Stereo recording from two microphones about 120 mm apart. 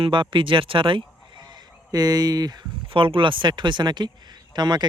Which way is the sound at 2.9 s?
45° right (ahead or behind).